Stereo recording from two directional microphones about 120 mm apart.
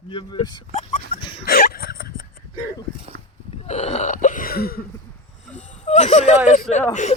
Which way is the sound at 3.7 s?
65° left (ahead or behind).